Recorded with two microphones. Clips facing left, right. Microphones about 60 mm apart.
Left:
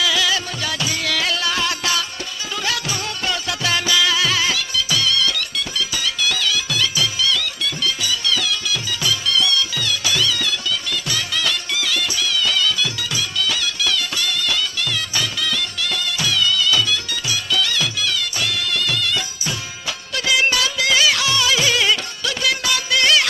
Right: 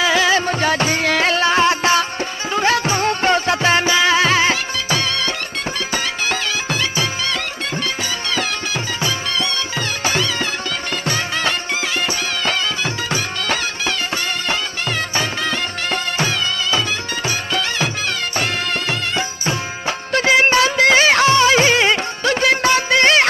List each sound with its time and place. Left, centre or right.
0.0 s music: right